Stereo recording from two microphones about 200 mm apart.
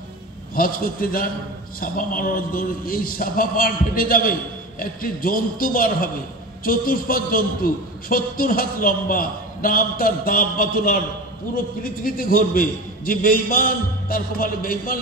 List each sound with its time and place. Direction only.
0.6 s a man's voice: 45° left (ahead or behind)